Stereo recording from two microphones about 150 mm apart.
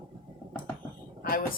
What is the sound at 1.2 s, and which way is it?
Speech, 70° left (ahead or behind).